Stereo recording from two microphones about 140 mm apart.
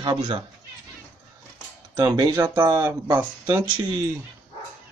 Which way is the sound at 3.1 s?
15° right (ahead or behind).